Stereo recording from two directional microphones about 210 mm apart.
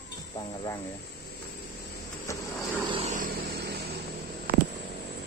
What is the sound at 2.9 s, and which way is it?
Vehicle, 35° right (ahead or behind).